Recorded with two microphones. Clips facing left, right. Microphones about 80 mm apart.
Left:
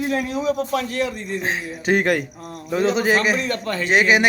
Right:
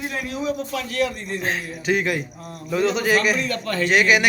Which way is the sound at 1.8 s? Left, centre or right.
Left.